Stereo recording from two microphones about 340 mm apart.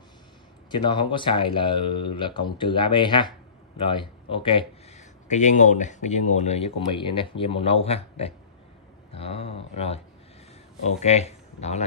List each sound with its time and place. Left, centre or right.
0.7 s speech: centre